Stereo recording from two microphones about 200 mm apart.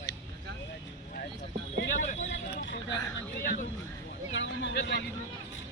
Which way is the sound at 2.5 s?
60° left (ahead or behind).